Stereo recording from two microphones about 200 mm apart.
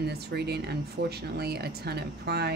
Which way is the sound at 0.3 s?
55° right (ahead or behind).